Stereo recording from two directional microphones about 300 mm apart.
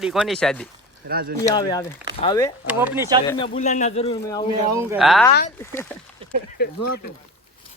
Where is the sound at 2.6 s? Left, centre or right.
Centre.